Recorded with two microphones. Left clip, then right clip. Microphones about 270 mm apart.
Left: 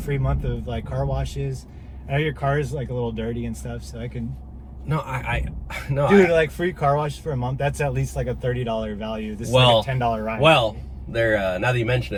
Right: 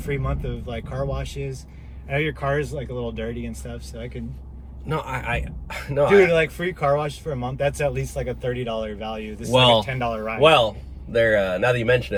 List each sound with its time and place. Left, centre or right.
0.1 s speech: centre
4.9 s speech: centre
6.1 s speech: centre
9.5 s speech: centre
9.8 s speech: centre
11.1 s speech: centre